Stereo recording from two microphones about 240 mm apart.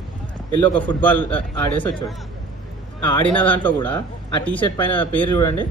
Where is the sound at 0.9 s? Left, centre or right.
Centre.